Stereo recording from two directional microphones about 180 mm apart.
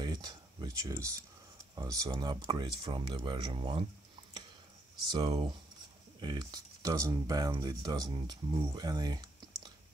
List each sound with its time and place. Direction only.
0.0 s a sound: 25° right (ahead or behind)
1.8 s speech: 20° right (ahead or behind)
5.1 s speech: 25° right (ahead or behind)